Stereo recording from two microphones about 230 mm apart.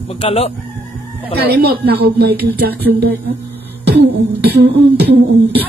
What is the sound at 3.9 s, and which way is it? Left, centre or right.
Beatboxing, right.